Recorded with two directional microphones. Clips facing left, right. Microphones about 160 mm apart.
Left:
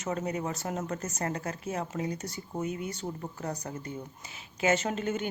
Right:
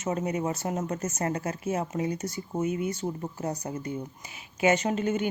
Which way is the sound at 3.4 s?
20° right (ahead or behind).